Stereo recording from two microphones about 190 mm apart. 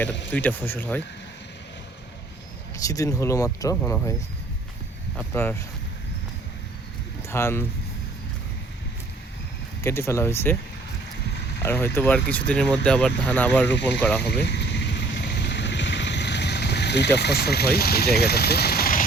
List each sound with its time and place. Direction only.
0.3 s speech: 10° left (ahead or behind)
2.8 s speech: 15° left (ahead or behind)
5.1 s speech: 10° left (ahead or behind)
7.3 s speech: 15° left (ahead or behind)
9.8 s speech: 15° left (ahead or behind)
11.6 s speech: 10° left (ahead or behind)
14.4 s vehicle: 65° left (ahead or behind)
17.2 s speech: 60° left (ahead or behind)